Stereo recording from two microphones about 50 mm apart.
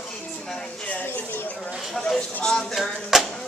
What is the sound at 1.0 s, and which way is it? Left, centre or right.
Speech, left.